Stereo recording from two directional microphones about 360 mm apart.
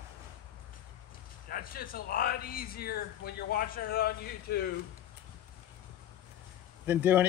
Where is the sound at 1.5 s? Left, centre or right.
Left.